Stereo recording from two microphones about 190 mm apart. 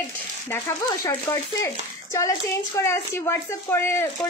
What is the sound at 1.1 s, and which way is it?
Speech, 15° left (ahead or behind).